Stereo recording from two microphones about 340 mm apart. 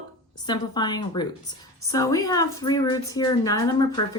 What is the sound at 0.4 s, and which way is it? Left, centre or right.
A woman's voice, centre.